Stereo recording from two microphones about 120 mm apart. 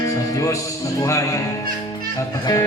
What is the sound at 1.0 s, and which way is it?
Speech, 25° left (ahead or behind).